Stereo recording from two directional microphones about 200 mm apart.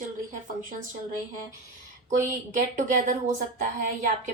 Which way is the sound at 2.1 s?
40° right (ahead or behind).